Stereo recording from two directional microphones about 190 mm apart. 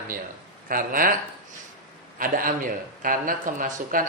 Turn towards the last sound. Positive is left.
turn(degrees=-45)  # may be behind; listen again after turning